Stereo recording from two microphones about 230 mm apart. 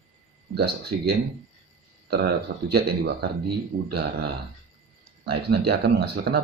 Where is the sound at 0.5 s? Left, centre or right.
Right.